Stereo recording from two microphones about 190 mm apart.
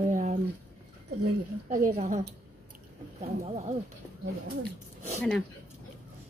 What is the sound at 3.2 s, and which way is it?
Speech, 35° right (ahead or behind).